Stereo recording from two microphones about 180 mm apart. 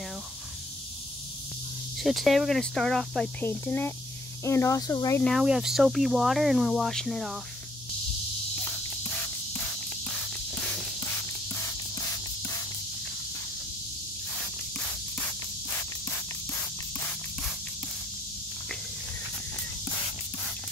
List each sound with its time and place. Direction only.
2.0 s speech: centre (ahead or behind); by 5.2 s 20° left (ahead or behind)
5.2 s speech: centre (ahead or behind)
8.6 s a sound: 10° left (ahead or behind)
10.5 s music: 5° left (ahead or behind)